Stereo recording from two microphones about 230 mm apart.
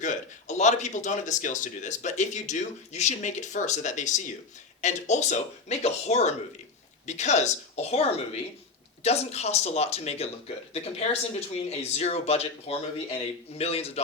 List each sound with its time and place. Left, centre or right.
0.0 s speech: left